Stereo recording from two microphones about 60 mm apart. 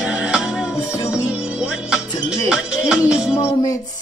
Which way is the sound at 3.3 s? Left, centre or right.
Left.